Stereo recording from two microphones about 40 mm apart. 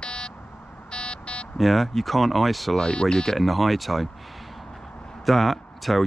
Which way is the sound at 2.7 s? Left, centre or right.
Centre.